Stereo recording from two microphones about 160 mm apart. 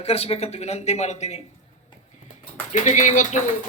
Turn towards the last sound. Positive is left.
turn(degrees=50)  # may be behind; listen again after turning